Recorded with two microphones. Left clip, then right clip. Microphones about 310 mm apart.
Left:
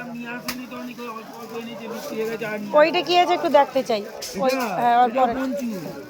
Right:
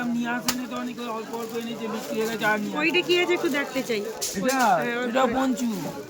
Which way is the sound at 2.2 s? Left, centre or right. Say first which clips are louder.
Right 3 dB; centre.